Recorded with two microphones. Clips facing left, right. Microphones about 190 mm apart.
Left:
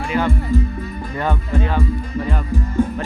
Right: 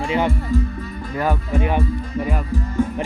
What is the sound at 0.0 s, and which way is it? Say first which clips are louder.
Speech: even; 25° right (ahead or behind).